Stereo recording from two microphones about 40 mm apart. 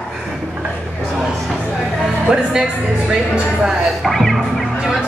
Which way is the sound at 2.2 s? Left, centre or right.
Centre.